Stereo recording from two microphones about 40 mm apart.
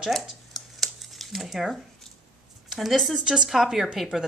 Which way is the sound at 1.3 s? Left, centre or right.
Centre.